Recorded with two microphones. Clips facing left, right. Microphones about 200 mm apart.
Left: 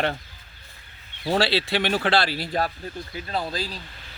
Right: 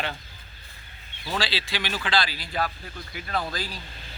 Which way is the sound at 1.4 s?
60° left (ahead or behind).